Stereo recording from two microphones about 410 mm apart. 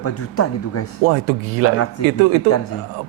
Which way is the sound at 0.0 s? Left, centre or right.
Left.